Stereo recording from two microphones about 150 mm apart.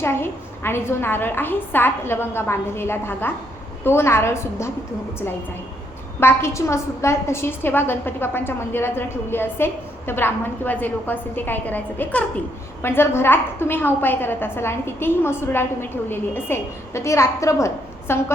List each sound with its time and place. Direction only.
0.0 s a woman's voice: 15° left (ahead or behind)
6.1 s a woman's voice: 15° left (ahead or behind)